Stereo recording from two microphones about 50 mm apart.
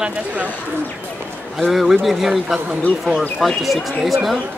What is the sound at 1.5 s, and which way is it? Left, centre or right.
Speech, centre.